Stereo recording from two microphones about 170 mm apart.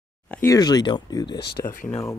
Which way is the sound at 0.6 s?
25° left (ahead or behind).